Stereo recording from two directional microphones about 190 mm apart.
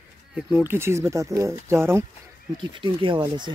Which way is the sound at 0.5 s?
10° right (ahead or behind).